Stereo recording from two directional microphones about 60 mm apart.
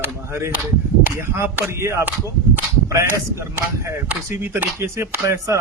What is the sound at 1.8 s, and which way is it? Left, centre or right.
Speech, right.